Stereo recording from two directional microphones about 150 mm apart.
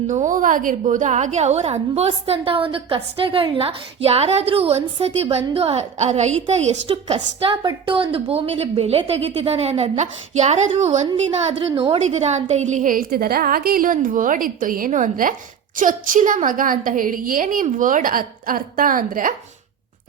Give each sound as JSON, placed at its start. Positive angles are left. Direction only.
{"t": 0.1, "sound": "a woman's voice", "side_deg": -60}
{"t": 7.5, "sound": "a woman's voice", "side_deg": -30}
{"t": 11.7, "sound": "a woman's voice", "side_deg": -35}